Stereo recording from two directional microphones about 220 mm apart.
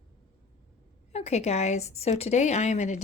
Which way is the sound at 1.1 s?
30° left (ahead or behind).